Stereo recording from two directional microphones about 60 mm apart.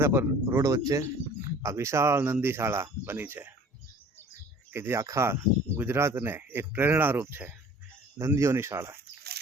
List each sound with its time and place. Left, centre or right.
0.0 s speech: right
0.6 s speech: right
3.0 s speech: right
4.7 s speech: right
4.9 s speech: right
5.2 s speech: right
8.4 s speech: right